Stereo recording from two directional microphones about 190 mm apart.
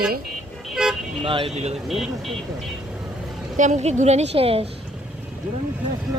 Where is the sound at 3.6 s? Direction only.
40° right (ahead or behind).